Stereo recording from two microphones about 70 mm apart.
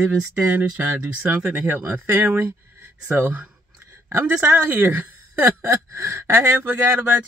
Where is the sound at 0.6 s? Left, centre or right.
Right.